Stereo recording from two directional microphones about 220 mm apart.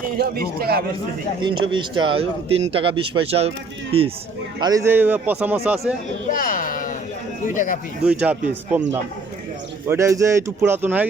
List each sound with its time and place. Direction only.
0.2 s speech: 45° right (ahead or behind)
1.4 s speech: 20° right (ahead or behind)
4.6 s speech: 15° right (ahead or behind)
6.3 s speech: 40° left (ahead or behind)
8.0 s speech: 5° right (ahead or behind)